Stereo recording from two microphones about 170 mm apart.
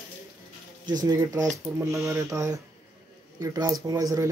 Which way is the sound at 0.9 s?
20° right (ahead or behind).